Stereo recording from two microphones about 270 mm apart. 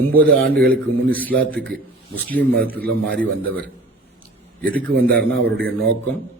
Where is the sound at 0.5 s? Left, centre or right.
Centre.